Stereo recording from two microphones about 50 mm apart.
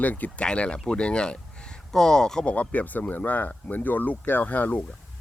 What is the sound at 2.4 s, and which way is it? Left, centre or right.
Speech, left.